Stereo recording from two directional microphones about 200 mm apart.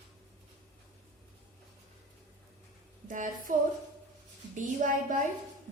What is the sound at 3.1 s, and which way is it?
A woman's voice, 40° right (ahead or behind).